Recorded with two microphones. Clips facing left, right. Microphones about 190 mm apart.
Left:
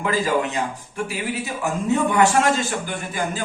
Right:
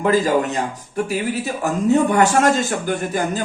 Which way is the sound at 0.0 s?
40° right (ahead or behind).